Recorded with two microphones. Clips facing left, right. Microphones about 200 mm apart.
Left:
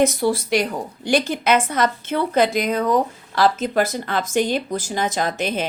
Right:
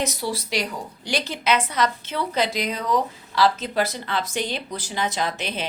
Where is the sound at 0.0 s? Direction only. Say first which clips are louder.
Left 9 dB; 50° left (ahead or behind).